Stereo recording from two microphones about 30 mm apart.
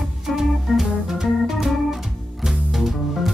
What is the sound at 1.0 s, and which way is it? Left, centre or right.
Organ, centre.